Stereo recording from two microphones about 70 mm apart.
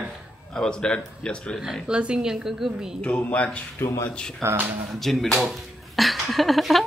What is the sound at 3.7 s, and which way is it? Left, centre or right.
Speech, left.